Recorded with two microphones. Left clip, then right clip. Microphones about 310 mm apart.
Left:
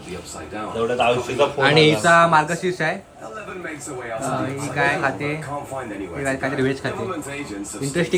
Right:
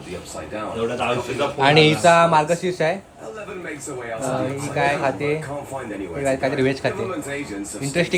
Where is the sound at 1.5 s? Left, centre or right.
Centre.